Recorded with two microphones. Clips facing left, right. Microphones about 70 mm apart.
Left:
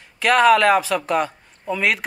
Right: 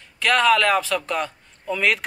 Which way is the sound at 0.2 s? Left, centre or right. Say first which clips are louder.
Left 4 dB; centre.